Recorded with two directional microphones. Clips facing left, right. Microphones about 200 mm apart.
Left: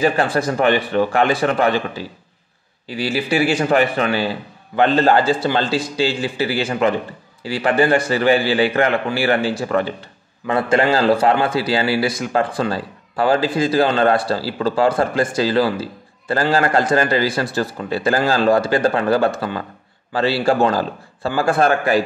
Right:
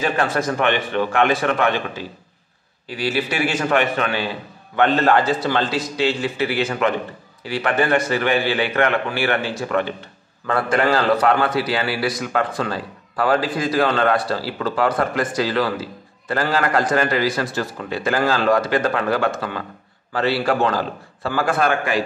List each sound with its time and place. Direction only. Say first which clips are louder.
0.0 s a man's voice: left 3 dB; 30° left (ahead or behind)
3.1 s a man's voice: left 4 dB; 30° left (ahead or behind)